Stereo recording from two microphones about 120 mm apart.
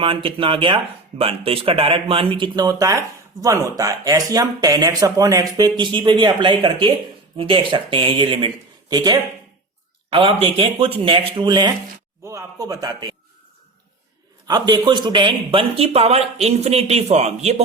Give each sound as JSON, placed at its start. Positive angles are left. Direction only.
{"t": 0.0, "sound": "speech", "side_deg": -50}
{"t": 2.6, "sound": "speech", "side_deg": -30}
{"t": 8.9, "sound": "speech", "side_deg": -35}
{"t": 10.1, "sound": "speech", "side_deg": -45}
{"t": 12.2, "sound": "speech", "side_deg": -25}
{"t": 14.4, "sound": "speech", "side_deg": -35}